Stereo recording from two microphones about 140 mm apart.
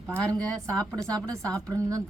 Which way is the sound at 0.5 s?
5° left (ahead or behind).